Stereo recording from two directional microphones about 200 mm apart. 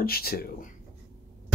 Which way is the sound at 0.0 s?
50° left (ahead or behind).